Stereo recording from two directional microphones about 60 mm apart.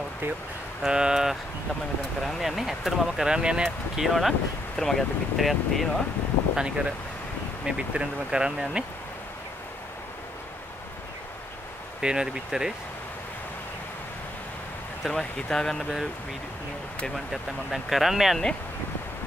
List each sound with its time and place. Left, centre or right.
0.8 s speech: centre
6.5 s speech: centre
12.0 s speech: centre
15.0 s speech: centre
17.1 s speech: centre